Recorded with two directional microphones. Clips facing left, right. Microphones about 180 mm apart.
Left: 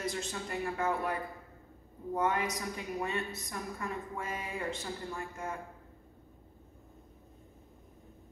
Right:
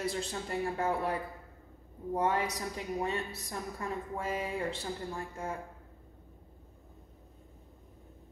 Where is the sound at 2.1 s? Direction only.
30° right (ahead or behind).